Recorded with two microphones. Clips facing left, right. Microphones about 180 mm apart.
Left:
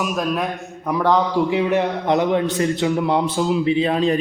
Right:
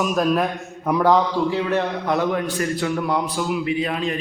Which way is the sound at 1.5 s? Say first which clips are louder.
Left 3 dB; 15° left (ahead or behind).